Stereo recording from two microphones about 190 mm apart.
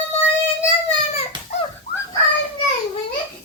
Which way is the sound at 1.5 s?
35° left (ahead or behind).